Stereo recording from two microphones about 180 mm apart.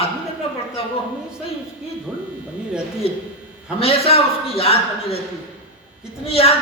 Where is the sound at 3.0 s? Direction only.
30° left (ahead or behind).